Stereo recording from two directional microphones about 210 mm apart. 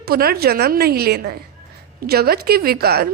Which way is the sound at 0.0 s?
45° right (ahead or behind).